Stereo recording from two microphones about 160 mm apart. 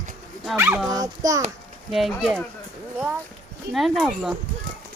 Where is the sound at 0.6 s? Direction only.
15° right (ahead or behind).